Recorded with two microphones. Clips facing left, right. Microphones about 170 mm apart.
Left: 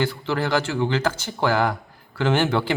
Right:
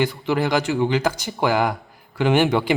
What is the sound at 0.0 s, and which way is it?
A man's voice, 15° right (ahead or behind).